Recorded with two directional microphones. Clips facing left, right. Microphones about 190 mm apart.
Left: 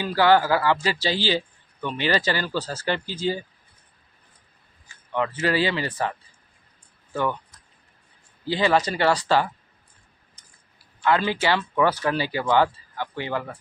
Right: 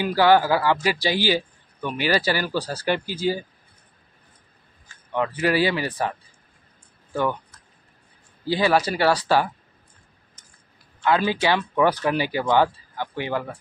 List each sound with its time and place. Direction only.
0.0 s speech: 15° right (ahead or behind)
5.1 s speech: 15° right (ahead or behind)
8.5 s speech: 10° right (ahead or behind)
11.1 s speech: 10° right (ahead or behind)